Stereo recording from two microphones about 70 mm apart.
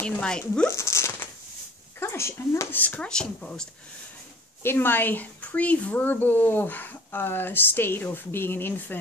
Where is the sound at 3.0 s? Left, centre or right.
Centre.